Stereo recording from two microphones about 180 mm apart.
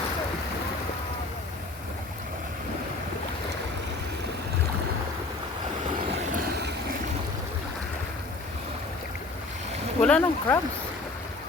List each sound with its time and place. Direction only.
6.3 s vehicle: 60° right (ahead or behind)
10.0 s speech: 5° left (ahead or behind)